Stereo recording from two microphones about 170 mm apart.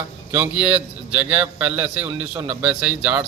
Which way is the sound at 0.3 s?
10° right (ahead or behind).